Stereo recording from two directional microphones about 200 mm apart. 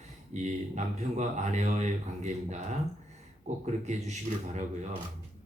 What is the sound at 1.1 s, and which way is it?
A man's voice, 35° right (ahead or behind).